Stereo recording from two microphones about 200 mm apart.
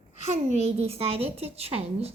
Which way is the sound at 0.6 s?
30° right (ahead or behind).